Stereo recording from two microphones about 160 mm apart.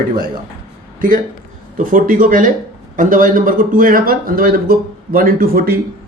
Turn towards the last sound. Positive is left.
turn(degrees=-65)  # may be behind; listen again after turning